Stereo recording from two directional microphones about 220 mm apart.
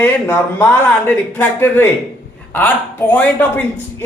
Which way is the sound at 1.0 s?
10° left (ahead or behind).